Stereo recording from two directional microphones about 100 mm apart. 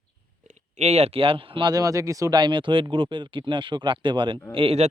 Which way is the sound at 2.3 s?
50° right (ahead or behind).